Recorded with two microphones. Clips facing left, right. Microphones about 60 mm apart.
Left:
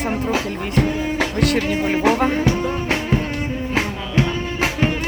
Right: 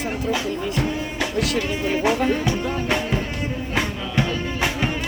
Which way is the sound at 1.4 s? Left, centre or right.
Left.